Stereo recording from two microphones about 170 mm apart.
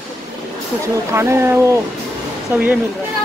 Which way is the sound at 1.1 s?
15° right (ahead or behind).